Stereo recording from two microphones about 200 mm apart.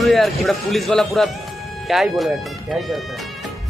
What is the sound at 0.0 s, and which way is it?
A man's voice, centre (ahead or behind).